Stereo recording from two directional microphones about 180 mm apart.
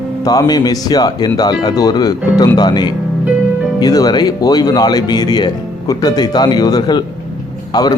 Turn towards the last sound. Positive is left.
turn(degrees=20)  # may be behind; listen again after turning